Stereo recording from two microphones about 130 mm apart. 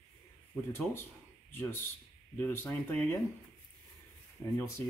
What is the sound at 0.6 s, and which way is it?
Speech, 15° left (ahead or behind).